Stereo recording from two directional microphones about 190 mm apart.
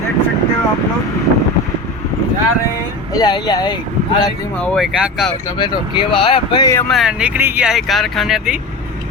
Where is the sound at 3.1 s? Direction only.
20° left (ahead or behind).